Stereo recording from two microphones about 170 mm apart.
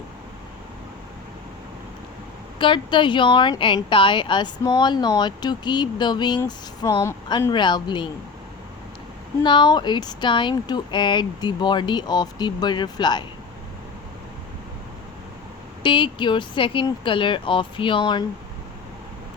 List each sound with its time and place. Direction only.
2.6 s speech: 30° left (ahead or behind)
9.4 s speech: 25° left (ahead or behind)
15.8 s speech: 30° left (ahead or behind)